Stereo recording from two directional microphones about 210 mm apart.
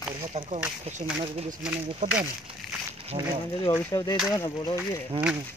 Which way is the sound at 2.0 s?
35° right (ahead or behind).